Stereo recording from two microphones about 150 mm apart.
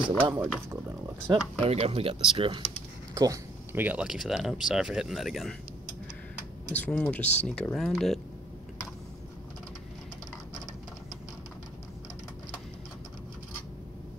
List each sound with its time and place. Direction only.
0.2 s speech: 10° right (ahead or behind)
1.6 s speech: 45° right (ahead or behind)
3.2 s a sound: 25° right (ahead or behind)
3.8 s speech: 10° right (ahead or behind)
6.7 s speech: 10° left (ahead or behind)